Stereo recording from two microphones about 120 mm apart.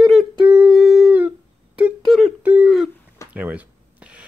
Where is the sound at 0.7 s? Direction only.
Centre (ahead or behind).